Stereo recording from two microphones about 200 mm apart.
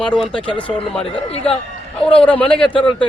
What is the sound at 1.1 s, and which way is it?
Speech, 30° left (ahead or behind).